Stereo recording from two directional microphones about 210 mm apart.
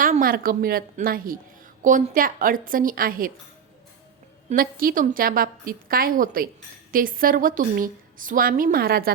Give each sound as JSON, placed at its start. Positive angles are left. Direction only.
{"t": 0.0, "sound": "a woman's voice", "side_deg": -40}
{"t": 4.4, "sound": "a woman's voice", "side_deg": -45}